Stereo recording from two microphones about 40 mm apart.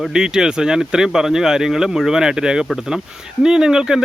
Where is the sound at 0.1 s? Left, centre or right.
Centre.